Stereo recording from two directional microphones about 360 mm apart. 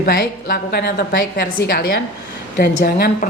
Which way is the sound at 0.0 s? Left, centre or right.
Left.